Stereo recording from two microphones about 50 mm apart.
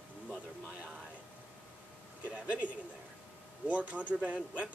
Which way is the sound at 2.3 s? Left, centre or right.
Right.